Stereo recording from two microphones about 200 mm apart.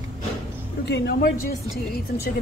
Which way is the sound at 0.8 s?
55° left (ahead or behind).